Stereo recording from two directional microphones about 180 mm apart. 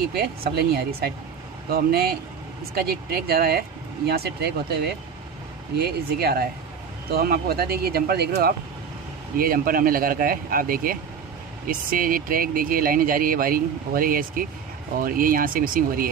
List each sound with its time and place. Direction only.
0.0 s speech: 60° right (ahead or behind)
5.8 s speech: 60° right (ahead or behind)